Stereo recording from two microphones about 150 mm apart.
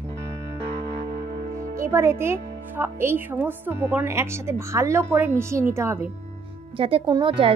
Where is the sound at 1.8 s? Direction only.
20° right (ahead or behind).